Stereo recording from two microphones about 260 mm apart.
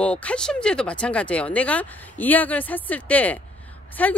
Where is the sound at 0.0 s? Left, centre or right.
Centre.